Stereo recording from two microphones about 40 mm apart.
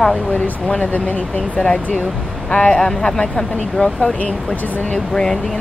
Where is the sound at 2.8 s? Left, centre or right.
Centre.